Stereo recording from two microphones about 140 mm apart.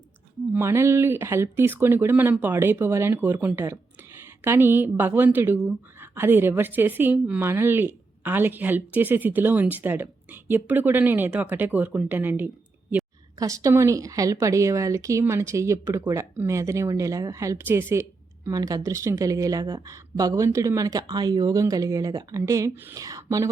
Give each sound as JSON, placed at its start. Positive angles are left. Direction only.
{"t": 0.5, "sound": "a woman's voice", "side_deg": -20}